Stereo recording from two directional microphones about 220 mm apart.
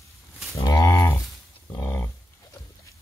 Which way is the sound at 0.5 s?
15° left (ahead or behind).